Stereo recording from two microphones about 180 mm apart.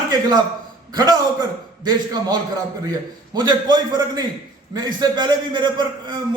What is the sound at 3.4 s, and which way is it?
A man's voice, 25° right (ahead or behind).